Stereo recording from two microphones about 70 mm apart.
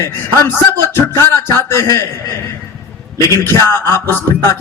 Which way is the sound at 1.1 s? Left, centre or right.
Left.